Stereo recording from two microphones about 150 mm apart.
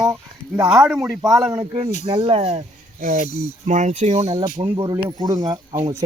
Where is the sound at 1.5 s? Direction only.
35° right (ahead or behind).